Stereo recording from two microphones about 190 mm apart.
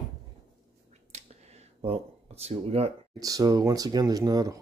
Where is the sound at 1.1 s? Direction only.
35° right (ahead or behind).